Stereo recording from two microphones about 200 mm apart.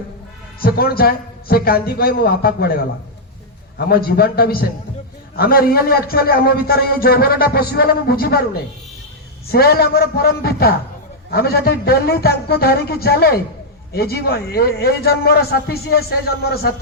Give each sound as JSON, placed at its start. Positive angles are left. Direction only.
{"t": 0.6, "sound": "a man's voice", "side_deg": 50}